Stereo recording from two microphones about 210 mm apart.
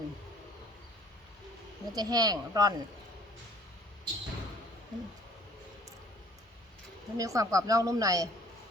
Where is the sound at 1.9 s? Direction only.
20° right (ahead or behind).